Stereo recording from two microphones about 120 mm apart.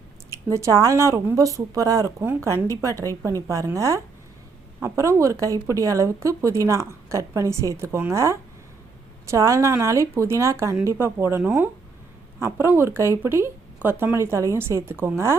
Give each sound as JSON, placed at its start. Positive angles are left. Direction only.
{"t": 0.3, "sound": "speech", "side_deg": -25}